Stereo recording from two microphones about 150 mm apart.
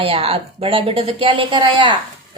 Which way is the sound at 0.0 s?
40° right (ahead or behind).